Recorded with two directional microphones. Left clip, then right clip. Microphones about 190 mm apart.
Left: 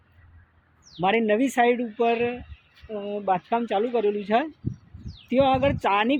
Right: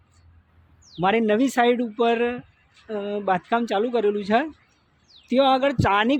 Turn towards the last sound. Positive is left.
turn(degrees=-20)  # may be behind; listen again after turning